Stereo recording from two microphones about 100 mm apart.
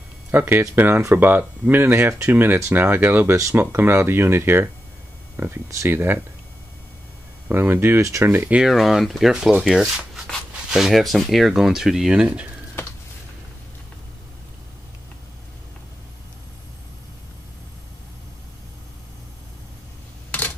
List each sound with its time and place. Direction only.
0.3 s speech: 20° right (ahead or behind)
7.4 s speech: 20° right (ahead or behind)
8.5 s speech: centre (ahead or behind)
20.2 s camera: 15° left (ahead or behind)